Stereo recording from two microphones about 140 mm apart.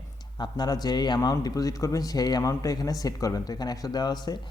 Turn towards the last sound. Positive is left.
turn(degrees=30)  # may be behind; listen again after turning